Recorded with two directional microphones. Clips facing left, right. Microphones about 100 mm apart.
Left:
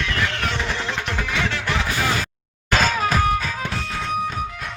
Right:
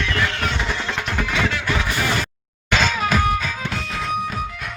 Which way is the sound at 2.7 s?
40° left (ahead or behind).